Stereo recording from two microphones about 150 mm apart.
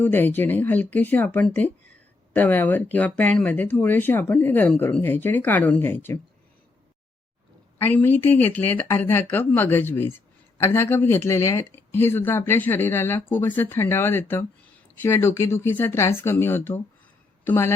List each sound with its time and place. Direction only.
0.0 s speech: 15° left (ahead or behind)
7.8 s speech: 15° left (ahead or behind)